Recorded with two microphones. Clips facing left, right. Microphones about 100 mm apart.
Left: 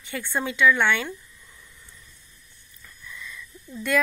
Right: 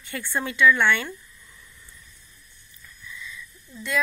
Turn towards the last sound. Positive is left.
turn(degrees=55)  # may be behind; listen again after turning